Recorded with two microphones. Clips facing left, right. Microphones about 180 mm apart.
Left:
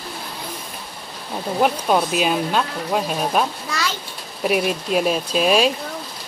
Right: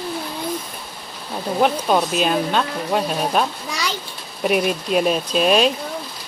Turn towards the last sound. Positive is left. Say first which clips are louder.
# right 1 dB
turn(degrees=0)  # may be behind; listen again after turning